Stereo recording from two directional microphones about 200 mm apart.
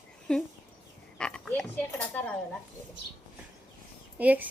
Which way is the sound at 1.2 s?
5° left (ahead or behind).